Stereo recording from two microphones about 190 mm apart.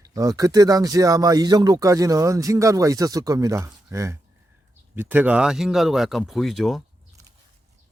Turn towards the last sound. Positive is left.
turn(degrees=0)  # may be behind; listen again after turning